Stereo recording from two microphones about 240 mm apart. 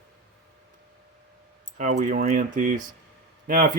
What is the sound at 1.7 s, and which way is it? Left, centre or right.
Speech, right.